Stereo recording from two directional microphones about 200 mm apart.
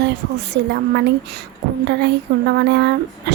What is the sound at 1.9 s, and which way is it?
A woman's voice, 60° right (ahead or behind).